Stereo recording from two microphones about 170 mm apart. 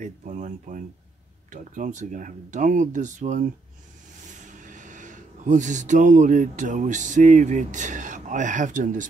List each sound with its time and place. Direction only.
0.0 s speech: 45° right (ahead or behind)